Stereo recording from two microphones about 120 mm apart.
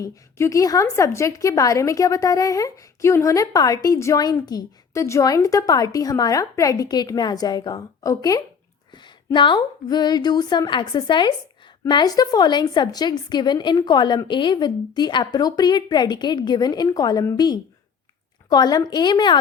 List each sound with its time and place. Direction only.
0.0 s a woman's voice: 25° left (ahead or behind)
8.9 s a woman's voice: 40° left (ahead or behind)